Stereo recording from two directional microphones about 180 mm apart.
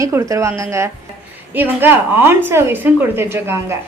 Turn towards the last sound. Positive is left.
turn(degrees=-15)  # may be behind; listen again after turning